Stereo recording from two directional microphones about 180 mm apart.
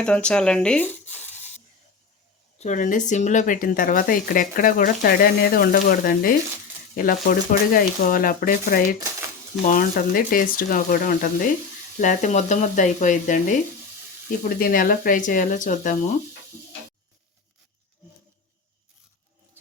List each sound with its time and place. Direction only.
0.0 s speech: 5° left (ahead or behind)
2.6 s speech: 45° left (ahead or behind)